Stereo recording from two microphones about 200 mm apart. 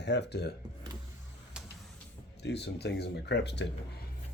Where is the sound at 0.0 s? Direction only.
60° left (ahead or behind).